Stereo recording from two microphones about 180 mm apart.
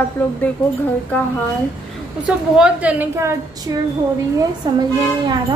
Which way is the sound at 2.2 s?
5° right (ahead or behind).